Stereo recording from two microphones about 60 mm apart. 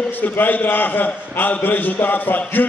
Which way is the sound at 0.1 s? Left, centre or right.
Left.